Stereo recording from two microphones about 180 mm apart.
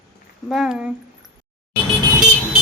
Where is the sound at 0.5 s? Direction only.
Centre (ahead or behind).